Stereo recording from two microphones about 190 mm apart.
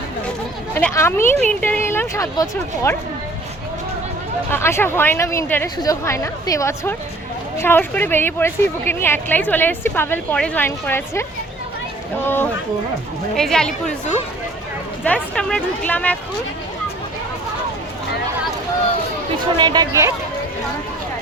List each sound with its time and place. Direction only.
0.7 s a woman's voice: 10° left (ahead or behind)
4.5 s a woman's voice: 10° left (ahead or behind)
15.0 s a woman's voice: 5° left (ahead or behind)
19.5 s speech: 20° right (ahead or behind)